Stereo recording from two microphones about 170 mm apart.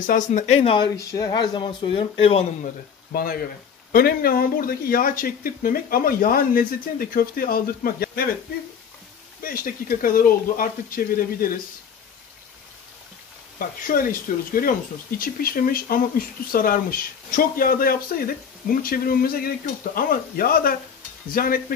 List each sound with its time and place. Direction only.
0.0 s speech: 50° left (ahead or behind); by 2.4 s 35° left (ahead or behind)
3.1 s speech: 60° left (ahead or behind)
9.4 s speech: 55° left (ahead or behind)
13.6 s speech: 55° left (ahead or behind)